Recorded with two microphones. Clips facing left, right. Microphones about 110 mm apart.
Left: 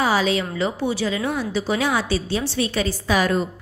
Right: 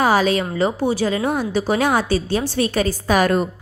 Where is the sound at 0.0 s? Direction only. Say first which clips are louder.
Right 3 dB; 50° right (ahead or behind).